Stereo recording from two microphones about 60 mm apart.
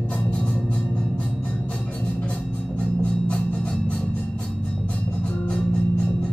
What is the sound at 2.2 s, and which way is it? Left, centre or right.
Music, centre.